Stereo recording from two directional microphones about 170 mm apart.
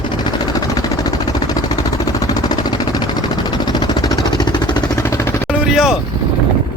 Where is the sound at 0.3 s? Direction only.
20° left (ahead or behind).